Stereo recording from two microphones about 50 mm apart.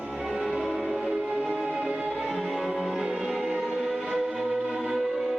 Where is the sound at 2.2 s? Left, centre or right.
Centre.